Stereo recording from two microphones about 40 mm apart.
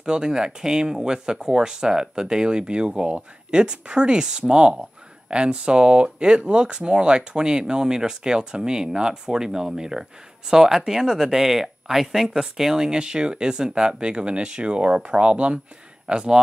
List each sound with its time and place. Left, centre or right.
0.0 s speech: centre